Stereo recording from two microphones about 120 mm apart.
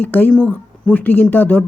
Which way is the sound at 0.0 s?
15° left (ahead or behind).